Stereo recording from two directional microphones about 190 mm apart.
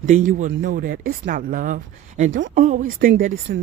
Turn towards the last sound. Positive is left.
turn(degrees=-50)  # may be behind; listen again after turning